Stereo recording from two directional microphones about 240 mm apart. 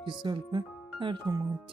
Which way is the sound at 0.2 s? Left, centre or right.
Centre.